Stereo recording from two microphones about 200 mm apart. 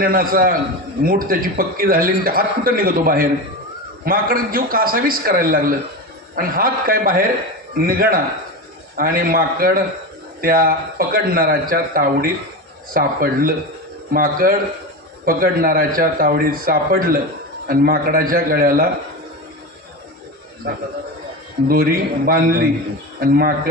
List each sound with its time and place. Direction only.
0.0 s a man's voice: 45° right (ahead or behind)
21.7 s a man's voice: 45° right (ahead or behind)